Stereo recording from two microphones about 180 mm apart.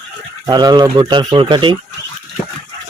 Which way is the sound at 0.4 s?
20° right (ahead or behind).